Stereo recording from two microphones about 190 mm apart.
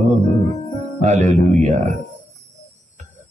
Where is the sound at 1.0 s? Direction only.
35° right (ahead or behind).